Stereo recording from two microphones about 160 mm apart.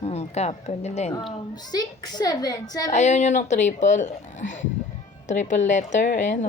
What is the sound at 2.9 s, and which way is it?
Speech, 45° left (ahead or behind).